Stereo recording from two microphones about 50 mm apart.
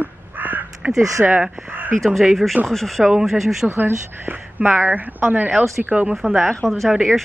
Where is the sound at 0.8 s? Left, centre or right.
Centre.